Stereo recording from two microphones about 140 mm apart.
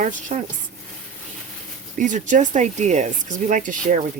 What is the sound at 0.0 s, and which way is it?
Speech, 65° right (ahead or behind).